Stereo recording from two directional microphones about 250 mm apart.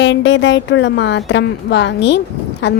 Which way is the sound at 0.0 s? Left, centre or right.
Left.